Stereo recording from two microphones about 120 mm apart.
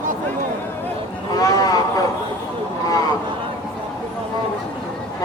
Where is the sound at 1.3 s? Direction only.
30° left (ahead or behind).